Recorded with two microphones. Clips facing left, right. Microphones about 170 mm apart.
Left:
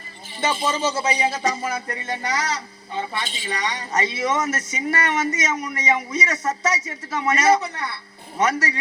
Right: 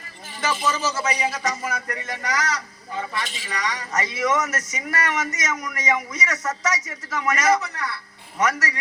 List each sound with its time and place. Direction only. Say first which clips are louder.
0.4 s speech: left 2 dB; 30° left (ahead or behind)